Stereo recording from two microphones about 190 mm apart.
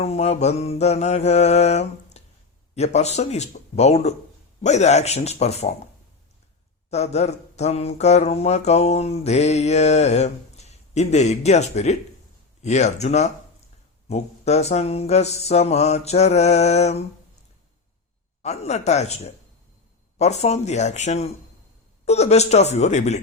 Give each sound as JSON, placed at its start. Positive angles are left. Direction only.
{"t": 0.0, "sound": "speech", "side_deg": 35}
{"t": 2.2, "sound": "a sound", "side_deg": 35}
{"t": 2.7, "sound": "speech", "side_deg": 35}
{"t": 6.9, "sound": "speech", "side_deg": 35}
{"t": 18.4, "sound": "speech", "side_deg": 35}